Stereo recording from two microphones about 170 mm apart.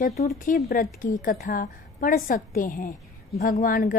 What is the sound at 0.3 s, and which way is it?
A woman's voice, 45° left (ahead or behind).